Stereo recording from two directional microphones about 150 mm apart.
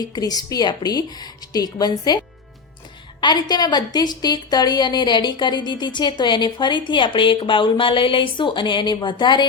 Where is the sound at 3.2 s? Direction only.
30° left (ahead or behind).